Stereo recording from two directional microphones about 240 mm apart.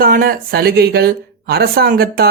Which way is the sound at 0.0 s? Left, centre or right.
Right.